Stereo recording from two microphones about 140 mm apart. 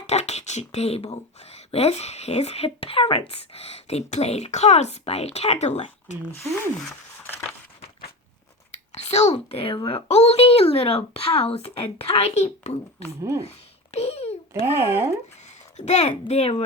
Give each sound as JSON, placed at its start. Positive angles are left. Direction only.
{"t": 0.1, "sound": "speech", "side_deg": 50}
{"t": 8.7, "sound": "speech", "side_deg": 50}
{"t": 10.1, "sound": "speech", "side_deg": 50}
{"t": 13.4, "sound": "a sound", "side_deg": 50}
{"t": 14.6, "sound": "speech", "side_deg": -15}
{"t": 15.4, "sound": "speech", "side_deg": 55}